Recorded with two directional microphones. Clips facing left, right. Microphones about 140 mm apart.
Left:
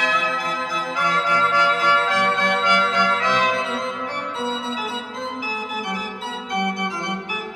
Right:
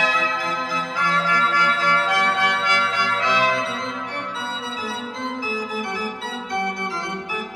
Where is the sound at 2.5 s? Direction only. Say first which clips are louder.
Left 3 dB; 15° left (ahead or behind).